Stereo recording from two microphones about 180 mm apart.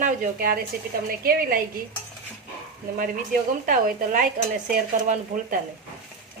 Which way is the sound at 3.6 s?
50° right (ahead or behind).